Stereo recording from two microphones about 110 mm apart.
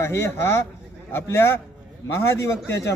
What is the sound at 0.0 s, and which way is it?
Speech, 25° left (ahead or behind).